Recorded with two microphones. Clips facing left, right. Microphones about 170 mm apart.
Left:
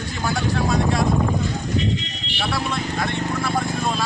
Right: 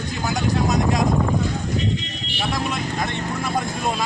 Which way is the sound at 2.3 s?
15° right (ahead or behind).